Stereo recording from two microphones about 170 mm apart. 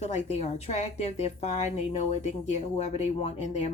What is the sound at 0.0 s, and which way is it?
A woman's voice, 40° left (ahead or behind).